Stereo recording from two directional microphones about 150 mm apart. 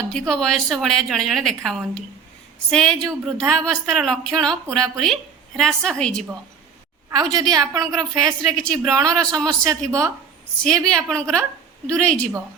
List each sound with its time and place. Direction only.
0.1 s a woman's voice: 5° left (ahead or behind)
7.1 s a woman's voice: 25° right (ahead or behind)
8.4 s a woman's voice: 5° left (ahead or behind)
8.9 s a woman's voice: 25° right (ahead or behind)
10.8 s a woman's voice: 5° left (ahead or behind)